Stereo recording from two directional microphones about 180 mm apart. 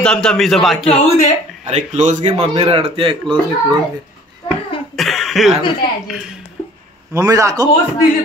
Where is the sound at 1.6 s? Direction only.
40° right (ahead or behind).